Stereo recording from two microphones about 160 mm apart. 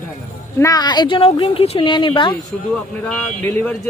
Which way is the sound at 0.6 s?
25° left (ahead or behind).